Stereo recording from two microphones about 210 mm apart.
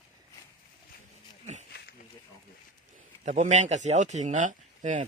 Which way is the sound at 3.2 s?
35° right (ahead or behind).